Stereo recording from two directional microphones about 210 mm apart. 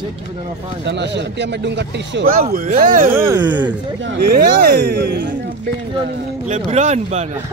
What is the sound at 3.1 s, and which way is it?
Music, 15° right (ahead or behind).